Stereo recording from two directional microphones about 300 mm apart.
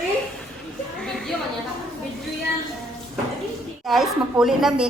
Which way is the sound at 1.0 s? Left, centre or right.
Centre.